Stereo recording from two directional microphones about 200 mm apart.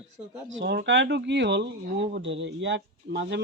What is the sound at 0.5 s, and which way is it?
Speech, 55° right (ahead or behind).